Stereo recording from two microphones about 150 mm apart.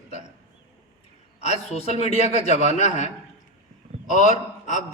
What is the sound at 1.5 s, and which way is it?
A man's voice, 45° left (ahead or behind).